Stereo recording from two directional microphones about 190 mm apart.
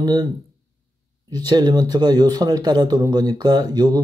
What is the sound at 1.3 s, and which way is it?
Speech, 20° right (ahead or behind).